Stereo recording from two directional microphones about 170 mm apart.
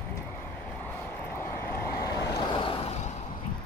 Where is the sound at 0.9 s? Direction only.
15° left (ahead or behind).